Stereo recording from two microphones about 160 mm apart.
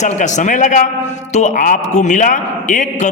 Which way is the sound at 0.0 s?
50° left (ahead or behind).